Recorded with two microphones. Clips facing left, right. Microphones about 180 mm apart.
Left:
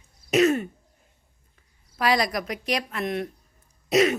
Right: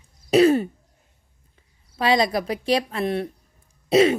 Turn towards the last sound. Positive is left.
turn(degrees=-30)  # may be behind; listen again after turning